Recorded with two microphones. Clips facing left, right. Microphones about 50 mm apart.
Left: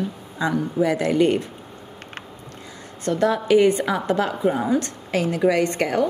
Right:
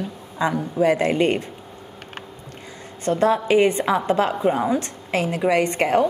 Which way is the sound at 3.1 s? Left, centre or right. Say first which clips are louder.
Right 1 dB; right.